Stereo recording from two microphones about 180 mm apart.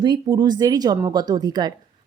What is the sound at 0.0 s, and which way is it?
A woman's voice, 25° right (ahead or behind).